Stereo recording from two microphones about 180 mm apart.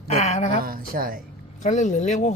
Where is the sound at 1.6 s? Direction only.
40° left (ahead or behind).